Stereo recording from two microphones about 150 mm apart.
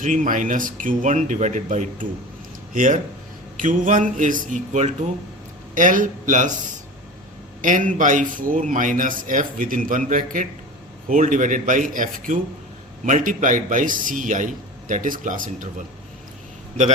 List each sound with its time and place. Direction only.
0.0 s a man's voice: 60° right (ahead or behind)
7.6 s a man's voice: 60° right (ahead or behind)